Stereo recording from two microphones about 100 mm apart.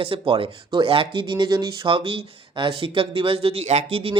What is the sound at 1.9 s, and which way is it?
Speech, 65° right (ahead or behind).